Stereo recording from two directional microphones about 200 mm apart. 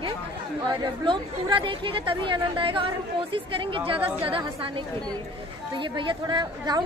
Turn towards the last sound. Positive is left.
turn(degrees=-20)  # may be behind; listen again after turning